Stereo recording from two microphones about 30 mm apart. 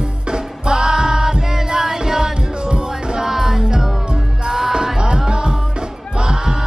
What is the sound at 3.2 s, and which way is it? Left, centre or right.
Music, centre.